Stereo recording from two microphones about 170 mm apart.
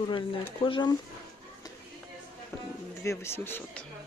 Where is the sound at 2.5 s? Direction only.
15° left (ahead or behind).